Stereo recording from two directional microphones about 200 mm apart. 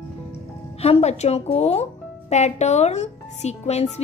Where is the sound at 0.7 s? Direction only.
30° left (ahead or behind).